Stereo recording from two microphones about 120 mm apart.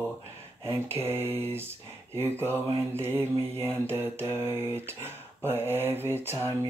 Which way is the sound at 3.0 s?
20° right (ahead or behind).